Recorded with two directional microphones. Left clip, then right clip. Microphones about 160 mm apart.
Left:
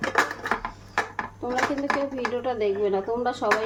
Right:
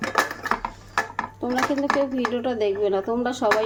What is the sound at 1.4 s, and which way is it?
A woman's voice, 25° right (ahead or behind).